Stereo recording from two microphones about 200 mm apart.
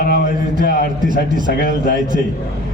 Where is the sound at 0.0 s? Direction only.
50° left (ahead or behind).